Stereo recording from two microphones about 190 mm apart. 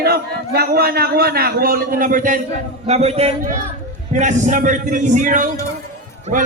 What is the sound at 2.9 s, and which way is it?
A man's voice, 35° right (ahead or behind).